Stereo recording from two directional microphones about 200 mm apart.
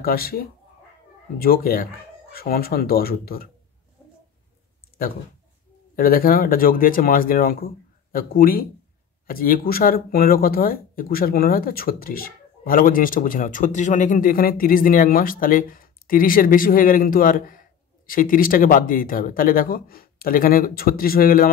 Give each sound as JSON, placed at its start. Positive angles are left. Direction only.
{"t": 0.0, "sound": "speech", "side_deg": 50}
{"t": 4.9, "sound": "a sound", "side_deg": 50}
{"t": 5.9, "sound": "speech", "side_deg": 45}